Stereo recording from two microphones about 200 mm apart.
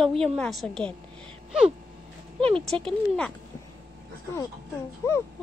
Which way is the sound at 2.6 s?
5° left (ahead or behind).